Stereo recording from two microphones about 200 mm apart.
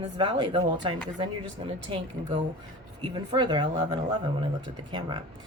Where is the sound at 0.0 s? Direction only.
25° right (ahead or behind).